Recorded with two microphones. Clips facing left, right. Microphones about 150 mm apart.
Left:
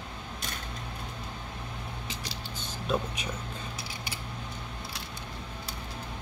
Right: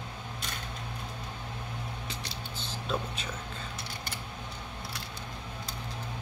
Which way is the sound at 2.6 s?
15° left (ahead or behind).